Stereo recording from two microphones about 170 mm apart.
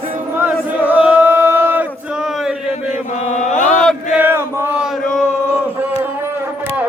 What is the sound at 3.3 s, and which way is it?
Chant, 45° left (ahead or behind).